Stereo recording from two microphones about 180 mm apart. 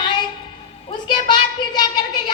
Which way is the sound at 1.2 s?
25° left (ahead or behind).